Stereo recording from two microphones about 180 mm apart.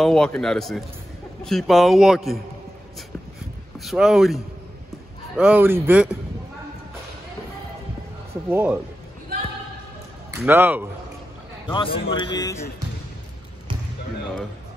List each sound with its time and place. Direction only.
0.0 s a man's voice: 5° left (ahead or behind)
3.8 s a man's voice: centre (ahead or behind)
8.5 s speech: 10° right (ahead or behind)
10.3 s speech: 10° right (ahead or behind)
11.6 s a man's voice: 30° left (ahead or behind)